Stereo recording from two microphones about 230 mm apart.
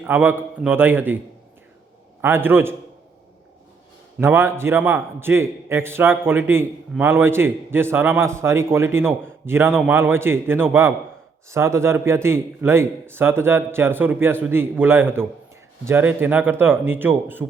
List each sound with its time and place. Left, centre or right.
0.0 s a man's voice: centre
2.2 s a man's voice: centre
4.2 s a man's voice: centre